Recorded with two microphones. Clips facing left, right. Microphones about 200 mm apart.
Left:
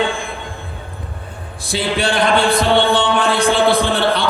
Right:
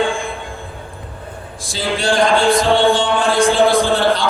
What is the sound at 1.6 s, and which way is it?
A man's voice, 60° left (ahead or behind).